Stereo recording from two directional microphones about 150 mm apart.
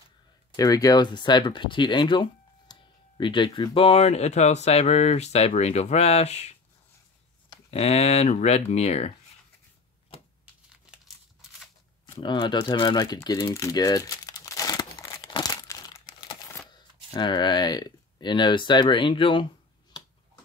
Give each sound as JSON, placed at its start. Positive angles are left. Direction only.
{"t": 0.6, "sound": "speech", "side_deg": 25}
{"t": 7.7, "sound": "speech", "side_deg": 45}
{"t": 12.2, "sound": "crumpling", "side_deg": 30}
{"t": 16.7, "sound": "speech", "side_deg": 30}